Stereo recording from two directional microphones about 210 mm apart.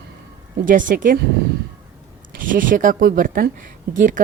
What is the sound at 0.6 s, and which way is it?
Speech, 40° right (ahead or behind).